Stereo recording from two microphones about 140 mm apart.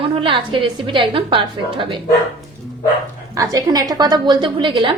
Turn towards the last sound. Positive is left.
turn(degrees=-35)  # may be behind; listen again after turning